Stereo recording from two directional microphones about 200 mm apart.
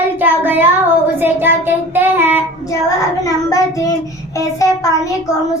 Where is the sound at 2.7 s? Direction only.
15° left (ahead or behind).